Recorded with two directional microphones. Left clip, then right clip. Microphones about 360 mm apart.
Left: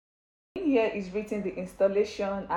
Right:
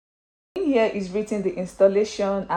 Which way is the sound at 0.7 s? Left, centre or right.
Right.